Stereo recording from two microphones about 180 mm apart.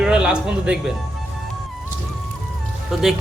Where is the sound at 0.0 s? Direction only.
5° right (ahead or behind).